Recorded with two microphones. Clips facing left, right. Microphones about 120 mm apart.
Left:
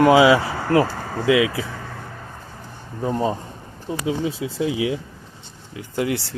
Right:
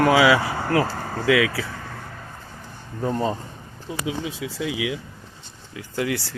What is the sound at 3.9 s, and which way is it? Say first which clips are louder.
Speech: left 5 dB; 35° left (ahead or behind).